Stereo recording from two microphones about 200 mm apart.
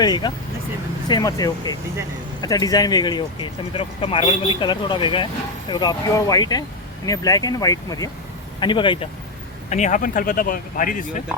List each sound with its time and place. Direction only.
0.0 s speech: 20° left (ahead or behind)
9.6 s speech: 35° left (ahead or behind)